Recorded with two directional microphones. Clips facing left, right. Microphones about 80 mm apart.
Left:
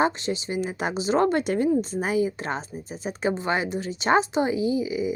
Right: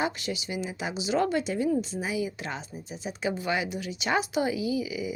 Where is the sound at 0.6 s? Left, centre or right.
Left.